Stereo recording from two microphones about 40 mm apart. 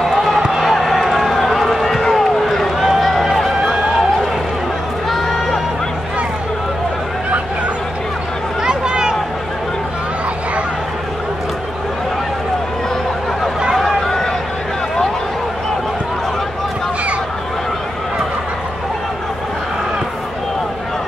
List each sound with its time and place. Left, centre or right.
0.0 s music: centre
0.4 s basketball bounce: centre
0.7 s run: centre
8.6 s a sound: right
13.7 s run: centre